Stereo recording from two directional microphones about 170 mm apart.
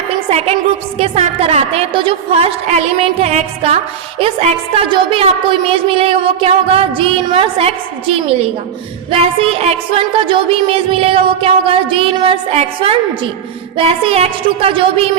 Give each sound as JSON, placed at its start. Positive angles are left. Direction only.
{"t": 0.3, "sound": "a woman's voice", "side_deg": -35}